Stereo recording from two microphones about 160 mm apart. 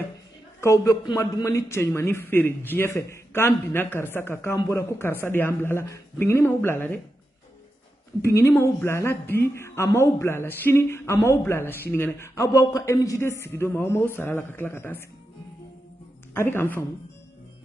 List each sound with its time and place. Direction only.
0.6 s a man's voice: 15° left (ahead or behind)
8.2 s a woman's voice: 15° left (ahead or behind)
16.3 s a woman's voice: 15° left (ahead or behind)